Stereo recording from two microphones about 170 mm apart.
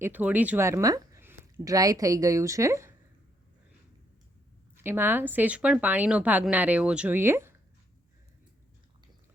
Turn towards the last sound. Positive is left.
turn(degrees=-15)  # may be behind; listen again after turning